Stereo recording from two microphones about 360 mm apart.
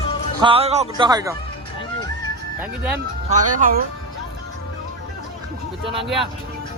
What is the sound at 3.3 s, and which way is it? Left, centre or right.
Speech, right.